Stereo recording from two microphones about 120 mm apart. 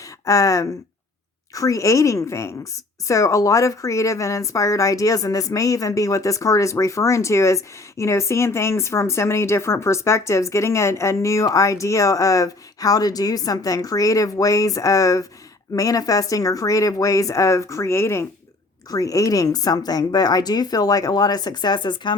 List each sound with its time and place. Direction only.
0.3 s a woman's voice: 30° left (ahead or behind)